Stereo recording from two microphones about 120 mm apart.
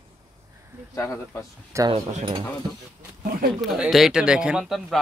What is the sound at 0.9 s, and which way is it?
Speech, 25° left (ahead or behind).